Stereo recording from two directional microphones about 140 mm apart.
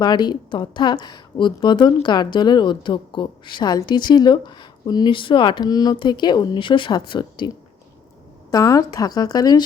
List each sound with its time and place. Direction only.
0.0 s speech: 30° left (ahead or behind)